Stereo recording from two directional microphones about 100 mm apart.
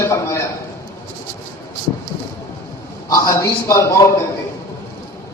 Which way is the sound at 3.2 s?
30° left (ahead or behind).